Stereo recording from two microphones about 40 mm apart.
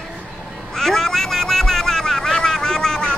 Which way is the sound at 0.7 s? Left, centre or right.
Centre.